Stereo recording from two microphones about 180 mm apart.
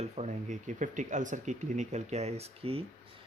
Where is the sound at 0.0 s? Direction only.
40° right (ahead or behind).